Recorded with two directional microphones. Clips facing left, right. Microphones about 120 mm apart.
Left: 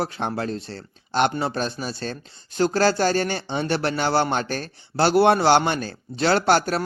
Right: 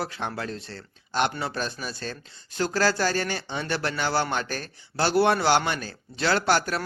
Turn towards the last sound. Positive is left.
turn(degrees=30)  # may be behind; listen again after turning